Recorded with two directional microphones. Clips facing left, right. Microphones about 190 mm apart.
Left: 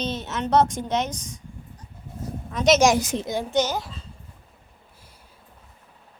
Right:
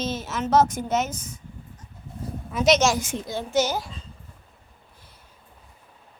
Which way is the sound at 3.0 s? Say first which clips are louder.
Left 3 dB; 40° left (ahead or behind).